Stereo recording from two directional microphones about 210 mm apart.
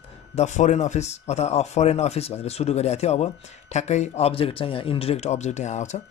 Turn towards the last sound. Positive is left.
turn(degrees=35)  # may be behind; listen again after turning